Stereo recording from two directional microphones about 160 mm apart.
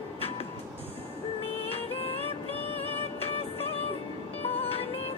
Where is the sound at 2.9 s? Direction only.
40° left (ahead or behind).